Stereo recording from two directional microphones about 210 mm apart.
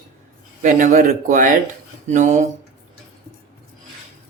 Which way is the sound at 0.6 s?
35° right (ahead or behind).